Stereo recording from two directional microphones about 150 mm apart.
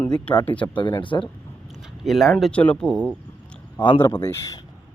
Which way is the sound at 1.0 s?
35° left (ahead or behind).